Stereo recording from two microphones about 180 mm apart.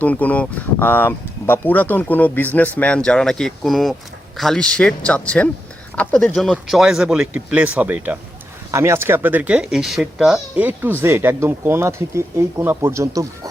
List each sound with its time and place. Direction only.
0.0 s speech: 10° left (ahead or behind); by 13.5 s 15° right (ahead or behind)